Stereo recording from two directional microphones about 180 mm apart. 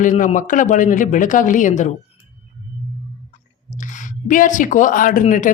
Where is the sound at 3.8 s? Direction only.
45° left (ahead or behind).